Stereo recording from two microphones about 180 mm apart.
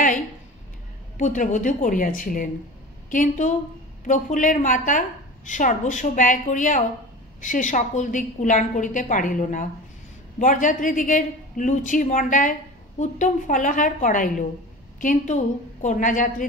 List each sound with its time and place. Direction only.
1.1 s a woman's voice: 45° left (ahead or behind)